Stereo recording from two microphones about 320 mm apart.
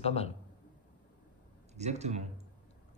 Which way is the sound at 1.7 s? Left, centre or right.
Right.